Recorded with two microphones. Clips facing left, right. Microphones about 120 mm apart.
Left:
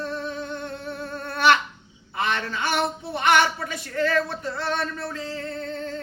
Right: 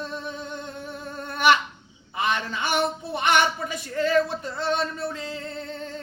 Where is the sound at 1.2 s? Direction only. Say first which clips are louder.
Even; 15° right (ahead or behind).